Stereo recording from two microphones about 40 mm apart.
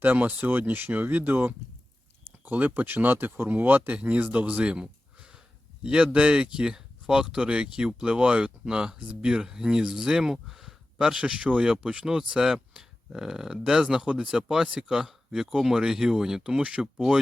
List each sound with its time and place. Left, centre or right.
0.0 s speech: right
3.9 s speech: right; by 10.2 s centre
10.3 s a sound: centre
11.0 s speech: right
12.3 s speech: centre